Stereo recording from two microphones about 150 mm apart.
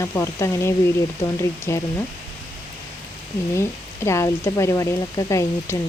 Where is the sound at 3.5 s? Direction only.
20° left (ahead or behind).